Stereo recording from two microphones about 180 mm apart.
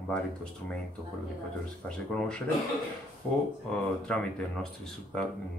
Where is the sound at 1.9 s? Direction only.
5° left (ahead or behind).